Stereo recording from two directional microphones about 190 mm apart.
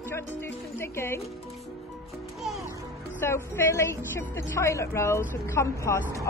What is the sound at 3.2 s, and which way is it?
A woman's voice, 15° left (ahead or behind).